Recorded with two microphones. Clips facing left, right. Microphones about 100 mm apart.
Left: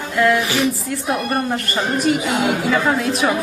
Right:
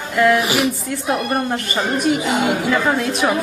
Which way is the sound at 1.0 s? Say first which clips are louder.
Right 1 dB; centre (ahead or behind).